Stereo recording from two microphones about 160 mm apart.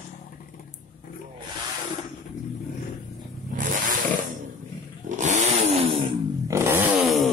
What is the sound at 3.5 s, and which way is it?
Vehicle, 55° right (ahead or behind).